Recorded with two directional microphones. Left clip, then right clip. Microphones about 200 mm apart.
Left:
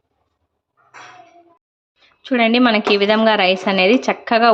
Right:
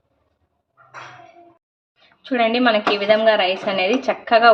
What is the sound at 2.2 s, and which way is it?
Speech, 30° left (ahead or behind).